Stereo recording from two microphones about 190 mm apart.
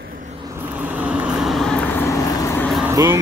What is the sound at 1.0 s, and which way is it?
Vehicle, 5° right (ahead or behind).